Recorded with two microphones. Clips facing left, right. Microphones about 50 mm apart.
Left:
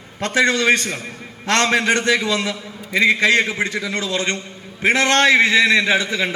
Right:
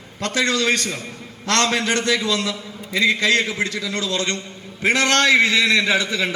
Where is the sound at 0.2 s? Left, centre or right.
Left.